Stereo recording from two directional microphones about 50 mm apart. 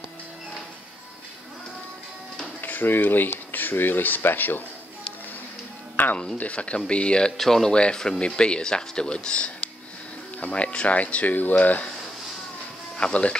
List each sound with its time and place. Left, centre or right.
2.6 s speech: left
6.0 s music: left
6.3 s speech: left
7.3 s speech: centre; by 11.9 s left
12.9 s speech: left